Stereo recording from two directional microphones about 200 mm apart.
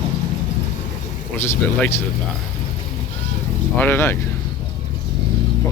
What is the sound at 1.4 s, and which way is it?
Speech, 10° left (ahead or behind).